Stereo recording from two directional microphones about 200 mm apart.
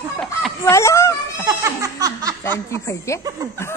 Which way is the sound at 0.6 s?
15° left (ahead or behind).